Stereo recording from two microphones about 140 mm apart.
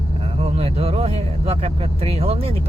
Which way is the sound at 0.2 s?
45° right (ahead or behind).